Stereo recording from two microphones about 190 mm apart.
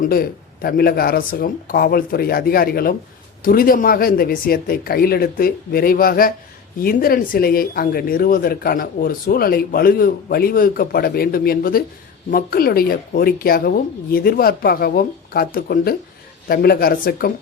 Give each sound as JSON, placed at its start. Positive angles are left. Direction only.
{"t": 0.0, "sound": "speech", "side_deg": 50}